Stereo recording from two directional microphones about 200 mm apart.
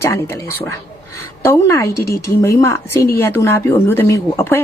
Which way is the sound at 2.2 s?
15° left (ahead or behind).